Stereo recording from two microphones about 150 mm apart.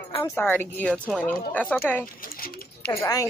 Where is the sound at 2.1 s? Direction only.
70° left (ahead or behind).